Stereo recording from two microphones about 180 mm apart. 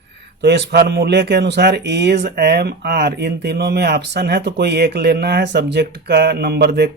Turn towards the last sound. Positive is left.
turn(degrees=-65)  # may be behind; listen again after turning